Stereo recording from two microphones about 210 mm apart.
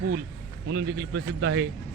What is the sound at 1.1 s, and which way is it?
Speech, 65° right (ahead or behind).